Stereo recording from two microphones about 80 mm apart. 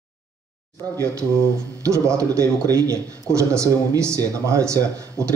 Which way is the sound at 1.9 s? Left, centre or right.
Right.